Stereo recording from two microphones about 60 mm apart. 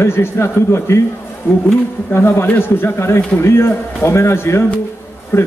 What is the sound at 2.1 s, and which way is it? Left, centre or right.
A man's voice, left.